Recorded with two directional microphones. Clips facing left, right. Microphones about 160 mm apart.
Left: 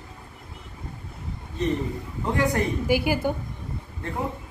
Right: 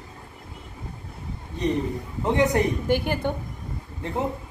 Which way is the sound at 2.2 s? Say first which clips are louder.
Right 3 dB; 20° right (ahead or behind).